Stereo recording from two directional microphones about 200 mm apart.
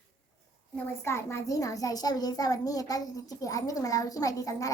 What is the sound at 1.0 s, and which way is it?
A child's voice, 15° left (ahead or behind).